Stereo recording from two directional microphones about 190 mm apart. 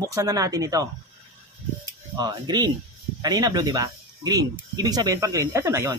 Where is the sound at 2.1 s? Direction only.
20° right (ahead or behind).